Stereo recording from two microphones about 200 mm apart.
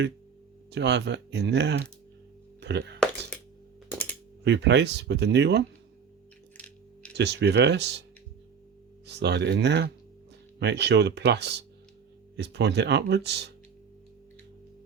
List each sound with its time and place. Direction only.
0.7 s speech: 60° right (ahead or behind)
3.8 s music: 5° left (ahead or behind)
4.4 s speech: 60° right (ahead or behind)
7.2 s speech: 60° right (ahead or behind)
9.0 s speech: 55° right (ahead or behind)